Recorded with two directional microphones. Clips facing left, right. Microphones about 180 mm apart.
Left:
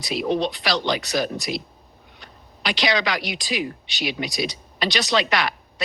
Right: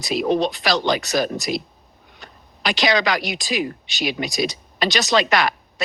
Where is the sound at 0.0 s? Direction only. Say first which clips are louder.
Right 3 dB; 45° right (ahead or behind).